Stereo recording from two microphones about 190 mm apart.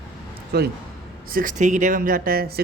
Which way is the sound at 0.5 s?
60° right (ahead or behind).